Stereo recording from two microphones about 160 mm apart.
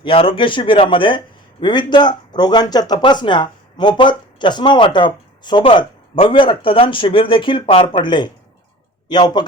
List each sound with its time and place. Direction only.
0.0 s speech: 35° left (ahead or behind)